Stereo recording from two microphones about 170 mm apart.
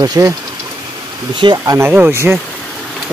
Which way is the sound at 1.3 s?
25° right (ahead or behind).